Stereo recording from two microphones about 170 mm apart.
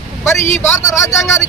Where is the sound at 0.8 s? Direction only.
20° left (ahead or behind).